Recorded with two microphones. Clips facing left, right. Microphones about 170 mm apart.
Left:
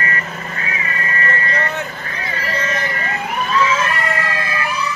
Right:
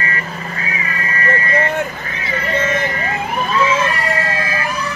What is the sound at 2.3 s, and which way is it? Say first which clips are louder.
Emergency vehicle: right 5 dB; 25° right (ahead or behind).